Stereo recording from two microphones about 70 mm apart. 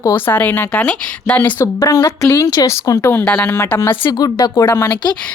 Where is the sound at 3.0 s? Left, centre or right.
Left.